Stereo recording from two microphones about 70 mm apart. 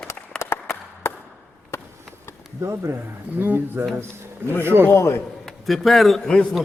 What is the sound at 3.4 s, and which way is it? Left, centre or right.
A man's voice, right.